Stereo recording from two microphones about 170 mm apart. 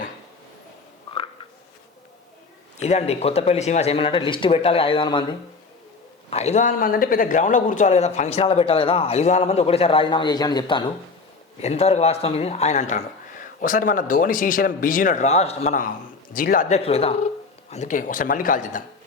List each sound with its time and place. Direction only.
2.7 s speech: 40° left (ahead or behind)
6.3 s speech: 40° left (ahead or behind)
11.6 s speech: 40° left (ahead or behind)
16.3 s speech: 55° left (ahead or behind)